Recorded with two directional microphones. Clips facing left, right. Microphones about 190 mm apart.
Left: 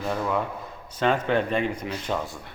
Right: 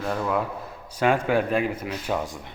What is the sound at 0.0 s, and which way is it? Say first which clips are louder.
Speech: right 1 dB; centre (ahead or behind).